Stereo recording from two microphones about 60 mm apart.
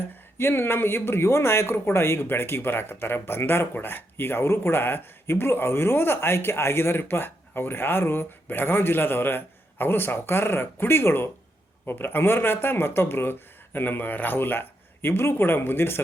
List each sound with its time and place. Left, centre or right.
0.3 s speech: left